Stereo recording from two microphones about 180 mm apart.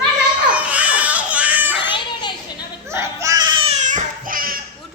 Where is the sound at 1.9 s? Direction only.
25° left (ahead or behind).